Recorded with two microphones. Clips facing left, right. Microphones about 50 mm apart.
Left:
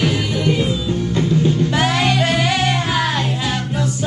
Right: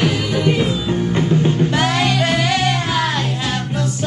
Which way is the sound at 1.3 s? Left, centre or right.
Right.